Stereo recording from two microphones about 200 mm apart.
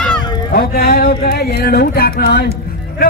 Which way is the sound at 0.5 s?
50° left (ahead or behind).